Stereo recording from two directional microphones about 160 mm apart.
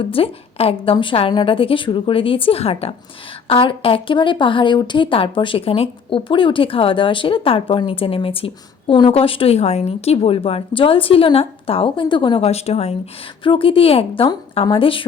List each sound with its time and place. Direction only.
0.0 s a woman's voice: 35° left (ahead or behind)